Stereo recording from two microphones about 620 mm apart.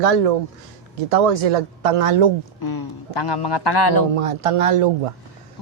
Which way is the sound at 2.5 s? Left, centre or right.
Left.